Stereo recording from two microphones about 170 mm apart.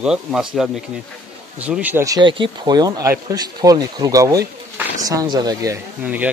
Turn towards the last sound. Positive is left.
turn(degrees=-10)  # may be behind; listen again after turning